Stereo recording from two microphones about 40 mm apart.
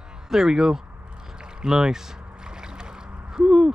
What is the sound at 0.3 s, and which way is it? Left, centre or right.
Speech, centre.